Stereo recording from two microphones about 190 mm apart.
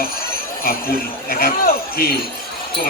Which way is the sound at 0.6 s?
50° left (ahead or behind).